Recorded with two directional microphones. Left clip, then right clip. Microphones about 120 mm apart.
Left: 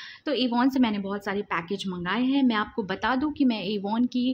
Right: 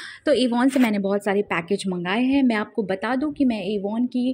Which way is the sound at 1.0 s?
55° right (ahead or behind).